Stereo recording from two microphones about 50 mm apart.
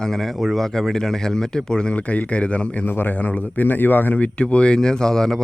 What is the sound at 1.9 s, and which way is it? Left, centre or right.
Speech, left.